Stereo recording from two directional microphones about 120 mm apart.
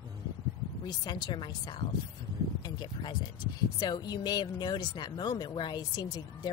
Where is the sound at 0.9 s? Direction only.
40° left (ahead or behind).